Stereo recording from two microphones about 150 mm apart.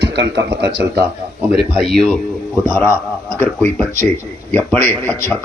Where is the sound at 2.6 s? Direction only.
15° left (ahead or behind).